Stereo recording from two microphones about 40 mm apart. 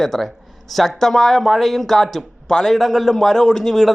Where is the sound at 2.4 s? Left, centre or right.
Centre.